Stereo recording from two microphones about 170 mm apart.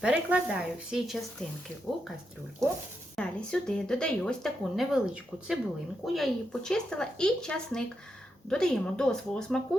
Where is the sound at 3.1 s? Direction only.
5° left (ahead or behind).